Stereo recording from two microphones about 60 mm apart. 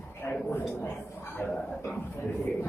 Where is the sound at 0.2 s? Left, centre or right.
Left.